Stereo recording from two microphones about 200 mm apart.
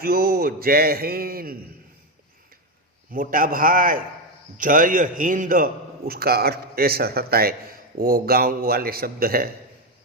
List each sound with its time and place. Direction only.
0.0 s a man's voice: 50° right (ahead or behind)
3.1 s a man's voice: 45° right (ahead or behind)